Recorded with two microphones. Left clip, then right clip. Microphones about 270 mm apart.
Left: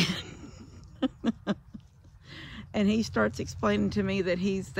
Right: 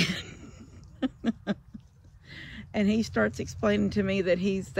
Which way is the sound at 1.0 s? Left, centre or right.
Centre.